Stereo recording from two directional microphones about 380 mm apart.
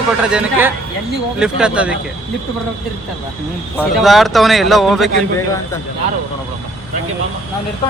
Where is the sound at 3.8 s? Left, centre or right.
Centre.